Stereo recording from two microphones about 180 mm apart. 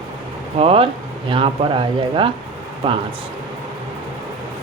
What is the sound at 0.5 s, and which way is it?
Speech, 30° right (ahead or behind).